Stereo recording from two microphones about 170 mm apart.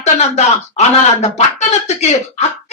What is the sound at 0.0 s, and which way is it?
A woman's voice, 40° left (ahead or behind).